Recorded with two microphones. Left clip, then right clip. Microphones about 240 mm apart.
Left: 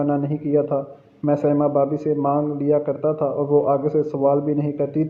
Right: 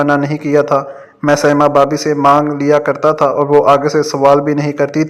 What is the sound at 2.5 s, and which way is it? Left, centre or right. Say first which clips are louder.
Speech: right 8 dB; centre.